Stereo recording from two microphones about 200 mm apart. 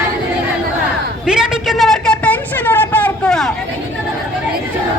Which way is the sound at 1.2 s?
5° right (ahead or behind).